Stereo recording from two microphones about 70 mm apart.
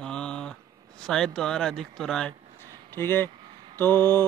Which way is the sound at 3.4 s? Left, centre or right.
Right.